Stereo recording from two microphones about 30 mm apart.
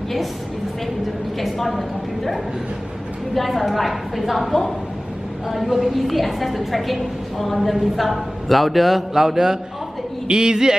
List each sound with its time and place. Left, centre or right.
1.4 s a man's voice: centre
3.3 s a man's voice: centre
5.9 s a man's voice: centre; by 10.8 s right